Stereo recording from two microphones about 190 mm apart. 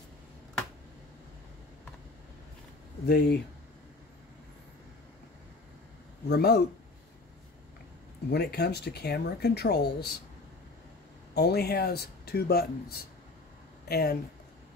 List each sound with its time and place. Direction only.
3.1 s speech: 55° left (ahead or behind)
6.2 s speech: 60° left (ahead or behind)
8.3 s speech: 55° left (ahead or behind)
11.3 s speech: 60° left (ahead or behind)